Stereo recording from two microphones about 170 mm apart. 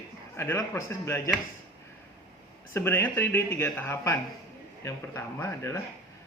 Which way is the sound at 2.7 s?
15° left (ahead or behind).